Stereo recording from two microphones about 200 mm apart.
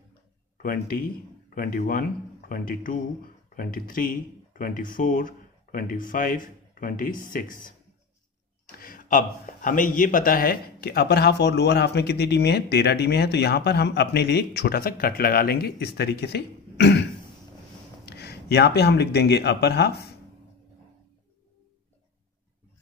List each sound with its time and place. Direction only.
0.6 s a man's voice: 50° left (ahead or behind)
8.7 s a man's voice: 45° left (ahead or behind)
18.0 s speech: 55° left (ahead or behind)